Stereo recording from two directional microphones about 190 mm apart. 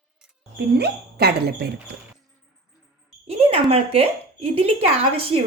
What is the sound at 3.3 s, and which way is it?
Speech, 30° right (ahead or behind).